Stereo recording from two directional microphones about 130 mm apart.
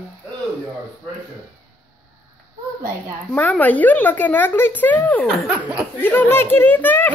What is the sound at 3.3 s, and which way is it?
Speech, 10° left (ahead or behind).